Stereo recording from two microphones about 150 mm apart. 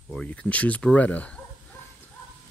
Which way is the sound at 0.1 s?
5° left (ahead or behind).